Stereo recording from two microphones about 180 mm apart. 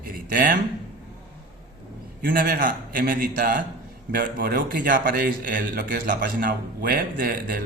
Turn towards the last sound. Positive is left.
turn(degrees=-55)  # may be behind; listen again after turning